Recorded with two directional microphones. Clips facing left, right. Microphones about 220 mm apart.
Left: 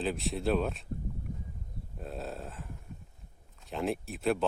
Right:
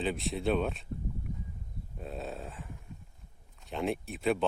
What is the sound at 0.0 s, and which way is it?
Speech, centre (ahead or behind).